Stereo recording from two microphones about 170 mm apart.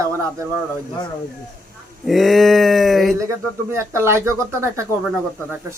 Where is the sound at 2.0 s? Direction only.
Centre (ahead or behind).